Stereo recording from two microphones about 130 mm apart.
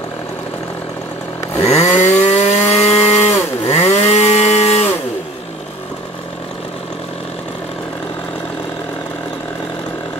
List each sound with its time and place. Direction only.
1.6 s chainsaw: 60° left (ahead or behind)